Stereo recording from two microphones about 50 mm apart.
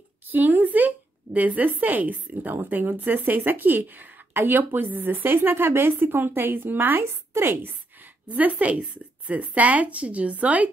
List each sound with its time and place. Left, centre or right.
0.3 s speech: right
8.3 s a woman's voice: right